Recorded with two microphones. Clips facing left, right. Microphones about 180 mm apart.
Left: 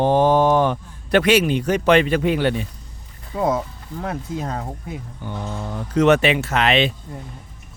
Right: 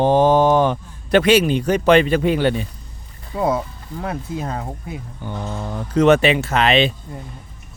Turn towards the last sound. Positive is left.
turn(degrees=-30)  # may be behind; listen again after turning